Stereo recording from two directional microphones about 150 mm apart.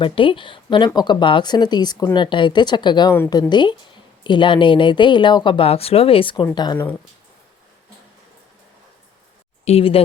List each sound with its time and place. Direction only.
0.0 s speech: 35° left (ahead or behind)
9.6 s speech: 40° left (ahead or behind)